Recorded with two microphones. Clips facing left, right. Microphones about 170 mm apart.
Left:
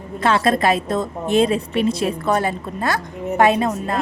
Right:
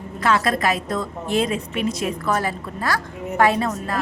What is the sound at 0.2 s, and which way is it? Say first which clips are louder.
A woman's voice: left 3 dB; 25° left (ahead or behind).